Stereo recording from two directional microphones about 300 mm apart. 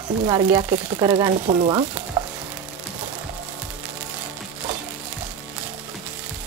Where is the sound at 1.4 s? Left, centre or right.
Right.